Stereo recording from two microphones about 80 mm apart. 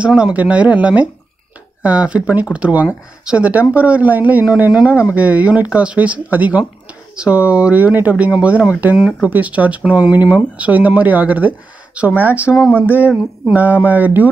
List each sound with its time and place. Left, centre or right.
0.2 s speech: centre